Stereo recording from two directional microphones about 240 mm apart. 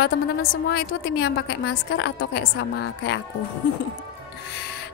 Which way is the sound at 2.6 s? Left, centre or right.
Left.